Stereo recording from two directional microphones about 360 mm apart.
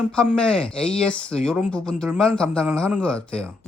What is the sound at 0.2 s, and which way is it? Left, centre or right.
Speech, centre.